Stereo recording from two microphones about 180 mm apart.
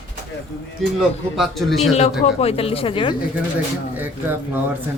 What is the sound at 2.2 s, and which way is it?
Speech, 35° left (ahead or behind).